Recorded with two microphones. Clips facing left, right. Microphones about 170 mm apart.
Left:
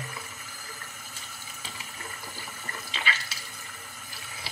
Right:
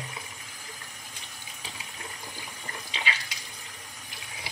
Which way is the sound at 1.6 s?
15° right (ahead or behind).